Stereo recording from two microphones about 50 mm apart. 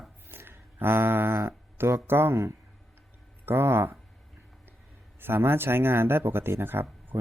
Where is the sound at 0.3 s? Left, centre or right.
Right.